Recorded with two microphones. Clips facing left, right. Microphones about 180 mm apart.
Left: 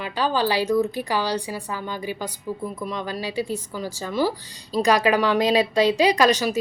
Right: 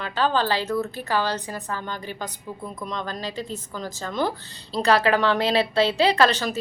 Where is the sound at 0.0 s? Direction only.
10° left (ahead or behind).